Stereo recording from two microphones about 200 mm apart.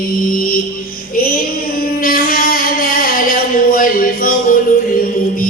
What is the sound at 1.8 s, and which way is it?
Music, 45° left (ahead or behind).